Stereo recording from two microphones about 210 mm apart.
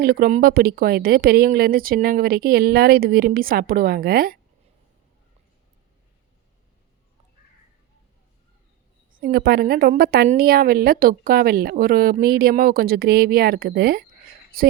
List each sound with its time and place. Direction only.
0.0 s a woman's voice: 45° right (ahead or behind)
9.1 s a woman's voice: 45° right (ahead or behind)